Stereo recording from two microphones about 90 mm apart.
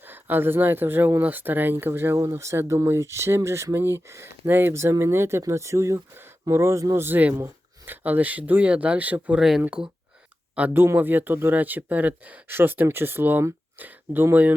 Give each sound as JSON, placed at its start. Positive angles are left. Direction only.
{"t": 0.0, "sound": "speech", "side_deg": -20}